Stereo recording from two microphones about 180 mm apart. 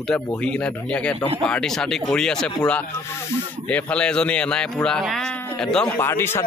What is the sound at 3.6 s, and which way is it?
Speech, 5° left (ahead or behind).